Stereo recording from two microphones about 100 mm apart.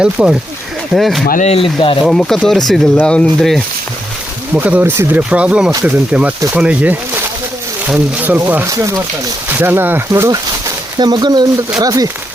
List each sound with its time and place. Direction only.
0.0 s speech: 10° right (ahead or behind)
1.5 s speech: 70° left (ahead or behind)
2.0 s speech: 5° left (ahead or behind)
4.5 s speech: 15° right (ahead or behind)
8.6 s speech: 30° right (ahead or behind)
9.5 s speech: 20° right (ahead or behind)
10.9 s speech: 45° right (ahead or behind)